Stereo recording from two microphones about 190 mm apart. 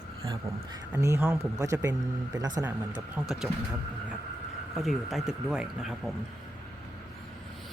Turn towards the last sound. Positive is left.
turn(degrees=-5)  # may be behind; listen again after turning